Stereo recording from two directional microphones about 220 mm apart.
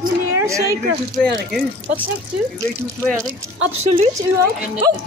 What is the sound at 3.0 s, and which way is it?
Speech, centre (ahead or behind).